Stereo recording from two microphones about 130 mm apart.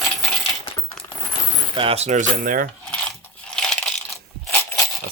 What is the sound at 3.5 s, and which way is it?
Coin, 5° left (ahead or behind).